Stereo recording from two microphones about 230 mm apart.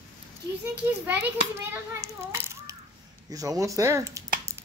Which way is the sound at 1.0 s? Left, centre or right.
Centre.